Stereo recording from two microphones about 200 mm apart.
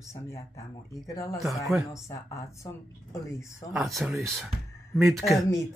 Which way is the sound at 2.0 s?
15° left (ahead or behind).